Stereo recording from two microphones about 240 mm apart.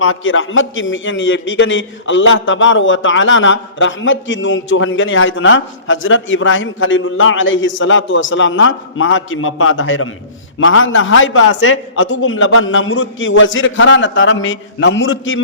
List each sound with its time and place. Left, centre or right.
0.0 s a man's voice: left